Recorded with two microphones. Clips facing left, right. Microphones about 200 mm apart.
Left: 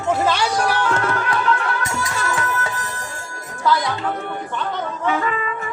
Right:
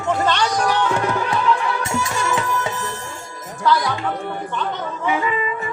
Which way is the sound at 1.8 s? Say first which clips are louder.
Right 2 dB; 25° right (ahead or behind).